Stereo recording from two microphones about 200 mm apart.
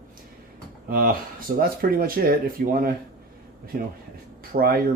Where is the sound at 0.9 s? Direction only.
50° right (ahead or behind).